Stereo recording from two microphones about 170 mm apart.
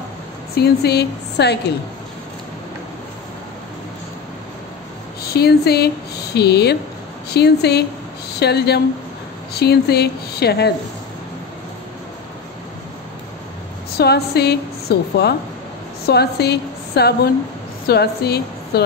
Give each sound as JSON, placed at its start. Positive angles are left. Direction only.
{"t": 0.6, "sound": "speech", "side_deg": 70}
{"t": 5.2, "sound": "speech", "side_deg": 65}
{"t": 13.9, "sound": "a woman's voice", "side_deg": 70}